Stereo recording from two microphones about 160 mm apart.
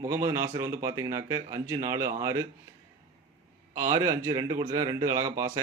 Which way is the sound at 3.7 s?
20° right (ahead or behind).